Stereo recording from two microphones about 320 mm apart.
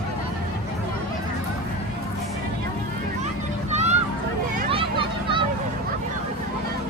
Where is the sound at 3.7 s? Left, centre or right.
Right.